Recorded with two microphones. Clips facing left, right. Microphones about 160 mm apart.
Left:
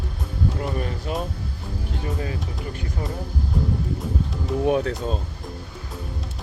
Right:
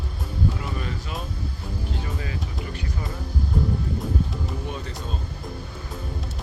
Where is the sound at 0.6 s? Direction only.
50° left (ahead or behind).